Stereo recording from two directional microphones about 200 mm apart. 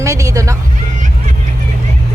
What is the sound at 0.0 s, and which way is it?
Speech, 15° right (ahead or behind).